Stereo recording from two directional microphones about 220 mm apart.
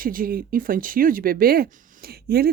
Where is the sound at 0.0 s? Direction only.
40° right (ahead or behind).